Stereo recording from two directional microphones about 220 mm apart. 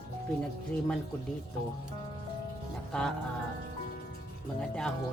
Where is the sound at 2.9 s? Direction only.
5° left (ahead or behind).